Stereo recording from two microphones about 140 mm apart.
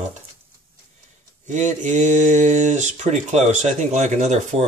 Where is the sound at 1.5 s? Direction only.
60° right (ahead or behind).